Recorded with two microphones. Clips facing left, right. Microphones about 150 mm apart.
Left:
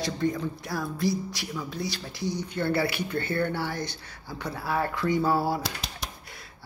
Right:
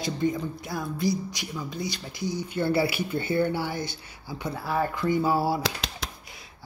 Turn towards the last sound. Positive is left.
turn(degrees=-90)